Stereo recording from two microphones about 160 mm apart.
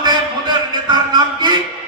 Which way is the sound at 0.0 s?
25° right (ahead or behind).